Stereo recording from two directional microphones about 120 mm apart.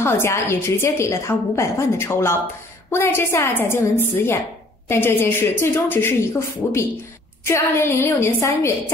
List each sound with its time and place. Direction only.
0.0 s a woman's voice: 20° left (ahead or behind)